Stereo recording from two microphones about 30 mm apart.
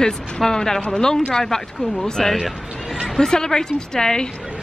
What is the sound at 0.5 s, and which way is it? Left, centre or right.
A woman's voice, centre.